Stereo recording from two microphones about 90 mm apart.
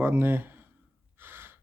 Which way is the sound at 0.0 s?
25° right (ahead or behind).